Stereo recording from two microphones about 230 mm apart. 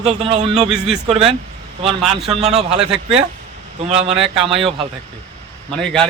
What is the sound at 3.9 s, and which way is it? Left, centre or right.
Speech, right.